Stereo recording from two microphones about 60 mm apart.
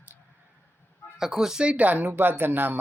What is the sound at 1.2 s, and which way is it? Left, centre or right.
Speech, centre.